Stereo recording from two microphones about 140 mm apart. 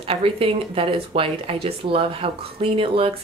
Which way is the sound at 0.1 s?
45° right (ahead or behind).